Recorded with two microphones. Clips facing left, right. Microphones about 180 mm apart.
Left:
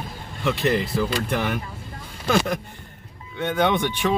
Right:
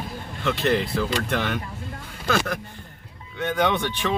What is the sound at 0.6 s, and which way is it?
Speech, 5° left (ahead or behind).